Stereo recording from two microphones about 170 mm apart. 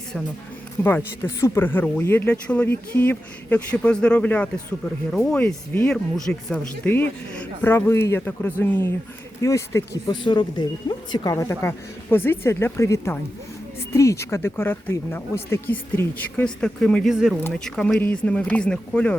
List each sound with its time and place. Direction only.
0.8 s speech: 15° left (ahead or behind)